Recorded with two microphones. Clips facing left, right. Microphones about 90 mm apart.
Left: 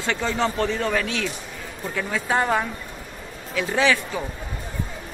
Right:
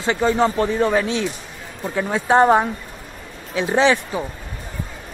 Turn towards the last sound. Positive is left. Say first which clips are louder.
# right 4 dB
turn(degrees=-25)  # may be behind; listen again after turning